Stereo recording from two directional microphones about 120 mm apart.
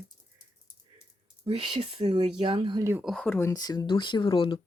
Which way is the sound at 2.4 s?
45° right (ahead or behind).